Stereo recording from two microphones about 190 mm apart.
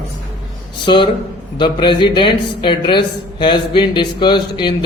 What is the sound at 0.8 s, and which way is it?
A woman's voice, 25° left (ahead or behind).